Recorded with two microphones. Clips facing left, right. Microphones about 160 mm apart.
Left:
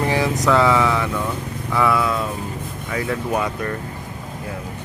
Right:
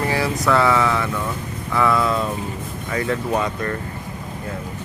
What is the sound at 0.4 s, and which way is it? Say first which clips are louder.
Speech: left 1 dB; 15° left (ahead or behind).